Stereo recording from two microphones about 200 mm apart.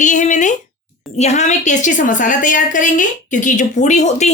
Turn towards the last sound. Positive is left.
turn(degrees=35)  # may be behind; listen again after turning